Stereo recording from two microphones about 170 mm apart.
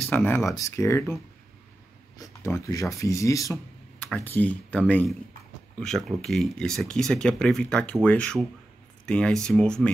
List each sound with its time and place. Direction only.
0.1 s speech: 10° left (ahead or behind)
2.1 s speech: 20° left (ahead or behind)